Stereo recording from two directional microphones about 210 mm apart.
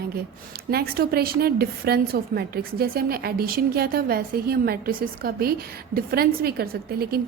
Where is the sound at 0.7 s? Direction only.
50° right (ahead or behind).